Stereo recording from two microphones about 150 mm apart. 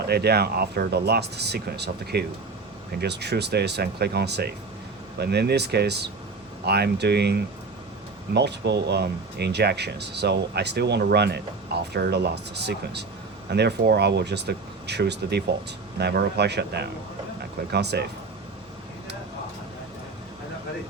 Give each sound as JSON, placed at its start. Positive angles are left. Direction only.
{"t": 0.0, "sound": "speech", "side_deg": -90}